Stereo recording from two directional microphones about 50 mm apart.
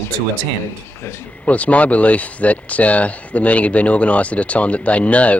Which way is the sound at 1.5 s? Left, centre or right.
Left.